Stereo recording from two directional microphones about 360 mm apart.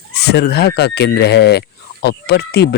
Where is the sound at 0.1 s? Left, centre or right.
Left.